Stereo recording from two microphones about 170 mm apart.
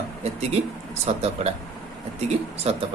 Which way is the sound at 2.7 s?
40° right (ahead or behind).